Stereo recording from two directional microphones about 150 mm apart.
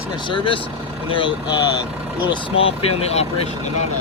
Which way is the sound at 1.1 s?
35° left (ahead or behind).